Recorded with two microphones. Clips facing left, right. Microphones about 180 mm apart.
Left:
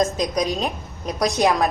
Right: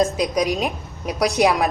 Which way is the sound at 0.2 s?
10° right (ahead or behind).